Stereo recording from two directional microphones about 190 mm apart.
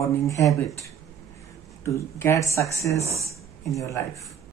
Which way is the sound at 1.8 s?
15° left (ahead or behind).